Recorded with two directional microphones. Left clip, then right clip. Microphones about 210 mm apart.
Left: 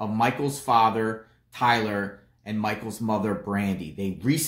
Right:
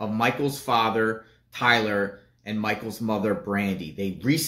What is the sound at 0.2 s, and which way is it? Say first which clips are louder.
Speech: even; 25° left (ahead or behind).